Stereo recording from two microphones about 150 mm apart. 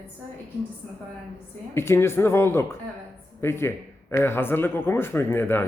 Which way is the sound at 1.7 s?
15° left (ahead or behind).